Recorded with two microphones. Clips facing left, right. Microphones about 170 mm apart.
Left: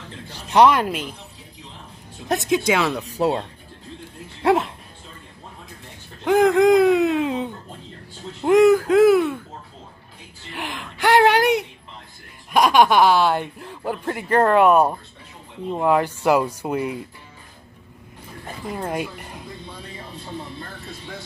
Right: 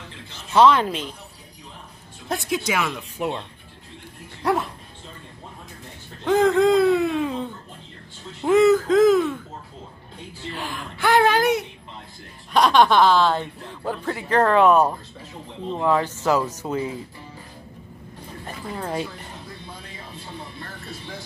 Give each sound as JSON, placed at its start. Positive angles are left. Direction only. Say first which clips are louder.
{"t": 0.5, "sound": "speech", "louder": "left 1 dB", "side_deg": 15}
{"t": 2.2, "sound": "speech", "louder": "left 5 dB", "side_deg": 20}
{"t": 4.4, "sound": "speech", "louder": "left 4 dB", "side_deg": 25}
{"t": 6.2, "sound": "speech", "louder": "left 2 dB", "side_deg": 15}
{"t": 8.4, "sound": "speech", "louder": "left 2 dB", "side_deg": 10}
{"t": 10.5, "sound": "speech", "louder": "left 2 dB", "side_deg": 20}
{"t": 11.1, "sound": "speech", "louder": "left 2 dB", "side_deg": 70}
{"t": 12.5, "sound": "speech", "louder": "left 1 dB", "side_deg": 10}
{"t": 18.7, "sound": "speech", "louder": "left 2 dB", "side_deg": 10}